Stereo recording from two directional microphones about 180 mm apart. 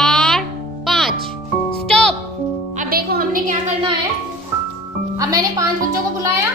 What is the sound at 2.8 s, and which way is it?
Music, 55° right (ahead or behind).